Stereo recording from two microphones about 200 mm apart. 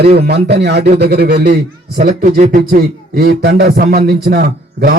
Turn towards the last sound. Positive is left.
turn(degrees=-50)  # may be behind; listen again after turning